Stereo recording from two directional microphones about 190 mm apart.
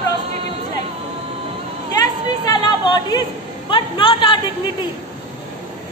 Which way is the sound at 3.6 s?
25° left (ahead or behind).